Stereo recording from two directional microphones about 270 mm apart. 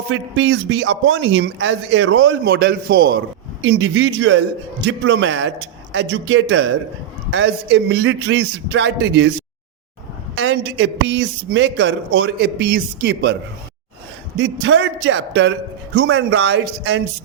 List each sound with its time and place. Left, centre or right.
0.1 s a man's voice: right
10.3 s speech: right
14.3 s a man's voice: right